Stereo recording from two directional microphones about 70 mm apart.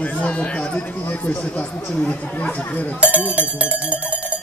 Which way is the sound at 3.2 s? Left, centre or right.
Right.